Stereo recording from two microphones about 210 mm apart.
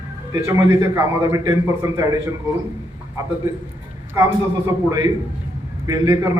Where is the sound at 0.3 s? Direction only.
15° right (ahead or behind).